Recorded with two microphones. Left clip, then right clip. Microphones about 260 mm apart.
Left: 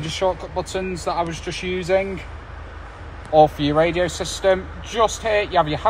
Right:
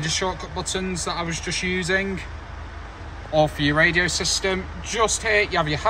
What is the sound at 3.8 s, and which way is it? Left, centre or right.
Speech, right.